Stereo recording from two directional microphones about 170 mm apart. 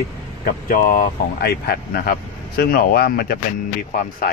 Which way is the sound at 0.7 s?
55° left (ahead or behind).